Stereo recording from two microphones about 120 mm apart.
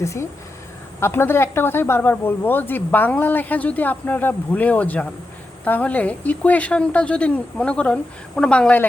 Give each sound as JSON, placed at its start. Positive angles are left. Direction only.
{"t": 0.0, "sound": "speech", "side_deg": 25}